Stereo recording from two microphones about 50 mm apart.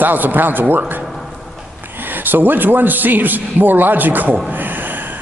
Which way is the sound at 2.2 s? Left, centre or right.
Right.